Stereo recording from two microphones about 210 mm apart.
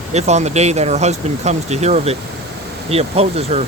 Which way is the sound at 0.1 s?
30° right (ahead or behind).